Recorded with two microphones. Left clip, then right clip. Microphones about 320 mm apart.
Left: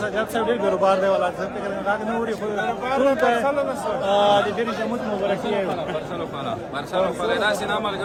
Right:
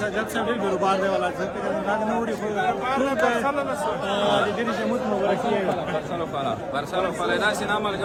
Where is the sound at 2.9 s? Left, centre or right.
Left.